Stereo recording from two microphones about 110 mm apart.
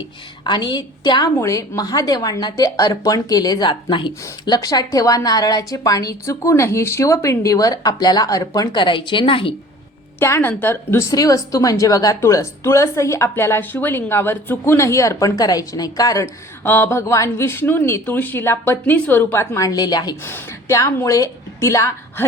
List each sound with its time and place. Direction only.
0.4 s a woman's voice: 40° left (ahead or behind)
10.2 s a woman's voice: 20° left (ahead or behind)
16.6 s a woman's voice: 20° left (ahead or behind); by 20.1 s 40° left (ahead or behind)
20.2 s a woman's voice: 25° left (ahead or behind)